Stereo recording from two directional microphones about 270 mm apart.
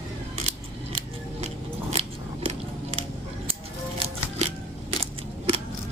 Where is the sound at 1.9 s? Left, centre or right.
Right.